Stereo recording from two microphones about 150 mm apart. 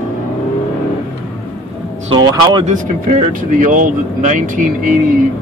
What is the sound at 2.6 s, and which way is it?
Speech, 55° right (ahead or behind).